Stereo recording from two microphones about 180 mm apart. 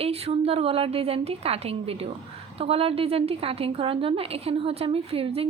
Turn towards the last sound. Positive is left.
turn(degrees=-35)  # may be behind; listen again after turning